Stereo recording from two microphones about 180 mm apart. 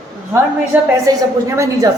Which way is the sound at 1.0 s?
15° right (ahead or behind).